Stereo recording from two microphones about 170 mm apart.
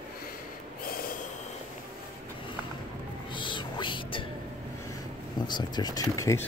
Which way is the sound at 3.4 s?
30° left (ahead or behind).